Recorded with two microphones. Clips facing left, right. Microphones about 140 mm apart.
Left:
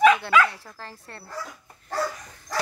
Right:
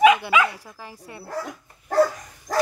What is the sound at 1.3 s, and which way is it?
Dog, 60° right (ahead or behind).